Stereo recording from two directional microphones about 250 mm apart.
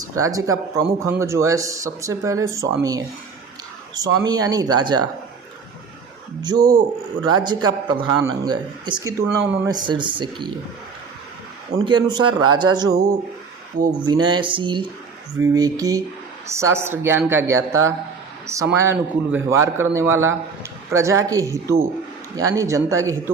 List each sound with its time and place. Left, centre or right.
0.2 s a man's voice: centre
4.3 s a man's voice: centre
6.4 s a man's voice: centre
11.9 s a man's voice: centre
12.2 s speech: right
12.5 s a man's voice: centre
14.0 s a man's voice: centre